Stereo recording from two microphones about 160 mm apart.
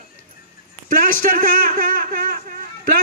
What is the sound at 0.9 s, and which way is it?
Speech, 60° right (ahead or behind).